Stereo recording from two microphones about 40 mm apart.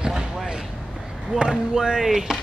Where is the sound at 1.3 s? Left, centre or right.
Right.